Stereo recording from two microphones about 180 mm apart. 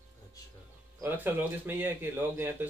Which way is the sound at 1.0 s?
10° right (ahead or behind).